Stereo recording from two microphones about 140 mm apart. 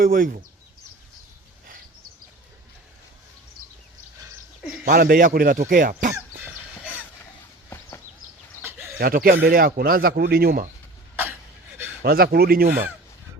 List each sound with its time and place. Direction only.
0.0 s speech: 90° right
4.9 s speech: 90° right; by 6.1 s 70° right (ahead or behind)
6.3 s cough: 15° right (ahead or behind)
7.7 s a sound: 20° left (ahead or behind)
9.0 s speech: 90° right
12.0 s speech: 90° right